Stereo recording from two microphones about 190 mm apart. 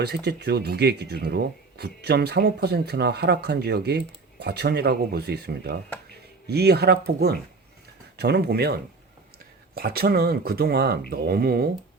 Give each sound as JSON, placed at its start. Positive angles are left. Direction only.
{"t": 0.0, "sound": "speech", "side_deg": -60}